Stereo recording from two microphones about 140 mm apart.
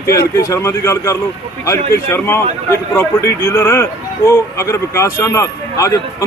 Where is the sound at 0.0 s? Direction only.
25° left (ahead or behind).